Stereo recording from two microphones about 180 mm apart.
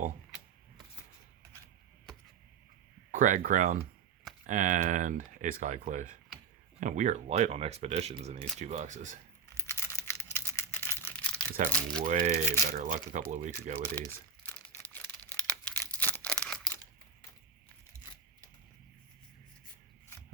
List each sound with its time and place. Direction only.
3.1 s speech: 45° right (ahead or behind)
9.6 s a sound: 15° left (ahead or behind)
11.7 s speech: 5° left (ahead or behind)
12.0 s speech: 45° right (ahead or behind)
13.7 s speech: 10° left (ahead or behind)
14.5 s crumpling: 10° left (ahead or behind)
15.8 s a sound: 10° left (ahead or behind)